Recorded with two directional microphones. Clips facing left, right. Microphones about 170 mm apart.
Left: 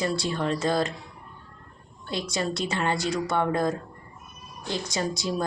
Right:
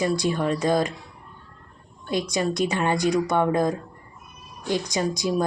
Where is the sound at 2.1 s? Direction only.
15° right (ahead or behind).